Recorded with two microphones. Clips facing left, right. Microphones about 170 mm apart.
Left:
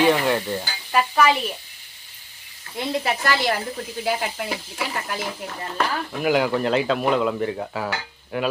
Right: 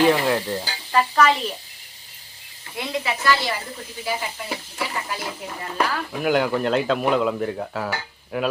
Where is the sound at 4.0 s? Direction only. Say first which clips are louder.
Left 3 dB; 65° left (ahead or behind).